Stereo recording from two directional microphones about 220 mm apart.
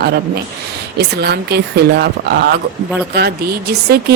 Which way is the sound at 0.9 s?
50° right (ahead or behind).